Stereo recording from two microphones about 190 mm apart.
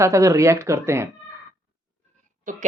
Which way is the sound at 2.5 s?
45° right (ahead or behind).